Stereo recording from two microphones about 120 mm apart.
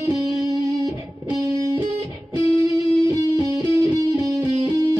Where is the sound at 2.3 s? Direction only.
30° right (ahead or behind).